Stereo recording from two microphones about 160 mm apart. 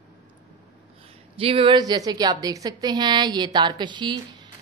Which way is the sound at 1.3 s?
35° right (ahead or behind).